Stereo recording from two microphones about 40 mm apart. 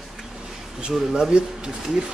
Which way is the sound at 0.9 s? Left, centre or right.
Centre.